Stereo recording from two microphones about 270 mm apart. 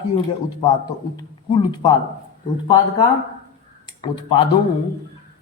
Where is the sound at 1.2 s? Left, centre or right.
Centre.